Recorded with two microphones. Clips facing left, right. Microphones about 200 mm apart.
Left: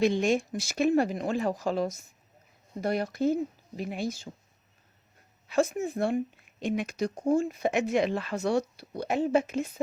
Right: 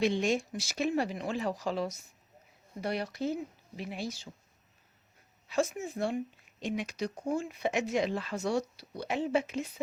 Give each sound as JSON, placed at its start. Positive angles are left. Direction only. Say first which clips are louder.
{"t": 0.0, "sound": "speech", "louder": "left 4 dB", "side_deg": 45}
{"t": 5.5, "sound": "speech", "louder": "left 5 dB", "side_deg": 55}